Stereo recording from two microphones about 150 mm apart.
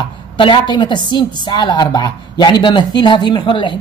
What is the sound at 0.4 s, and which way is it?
A woman's voice, 30° left (ahead or behind).